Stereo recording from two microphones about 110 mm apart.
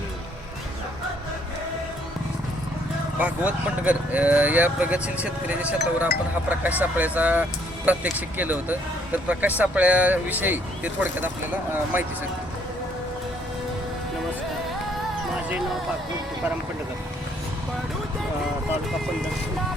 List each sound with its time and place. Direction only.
3.2 s speech: 10° right (ahead or behind)